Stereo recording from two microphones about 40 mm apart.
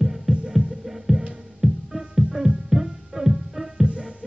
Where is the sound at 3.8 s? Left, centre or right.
Right.